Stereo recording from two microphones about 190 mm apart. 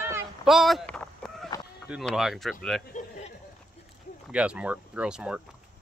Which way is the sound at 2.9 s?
40° left (ahead or behind).